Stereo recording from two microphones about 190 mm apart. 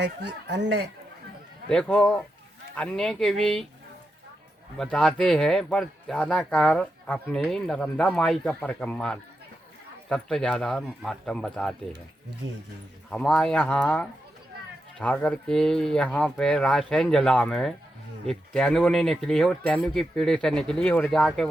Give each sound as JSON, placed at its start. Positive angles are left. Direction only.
{"t": 0.0, "sound": "speech", "side_deg": -65}
{"t": 1.7, "sound": "speech", "side_deg": 5}
{"t": 4.8, "sound": "speech", "side_deg": 5}
{"t": 13.1, "sound": "speech", "side_deg": 5}